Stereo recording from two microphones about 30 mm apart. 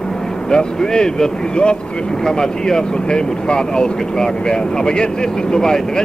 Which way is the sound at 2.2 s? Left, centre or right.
Left.